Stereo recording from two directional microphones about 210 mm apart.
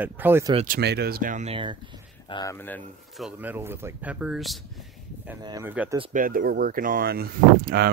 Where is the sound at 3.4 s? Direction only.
10° right (ahead or behind).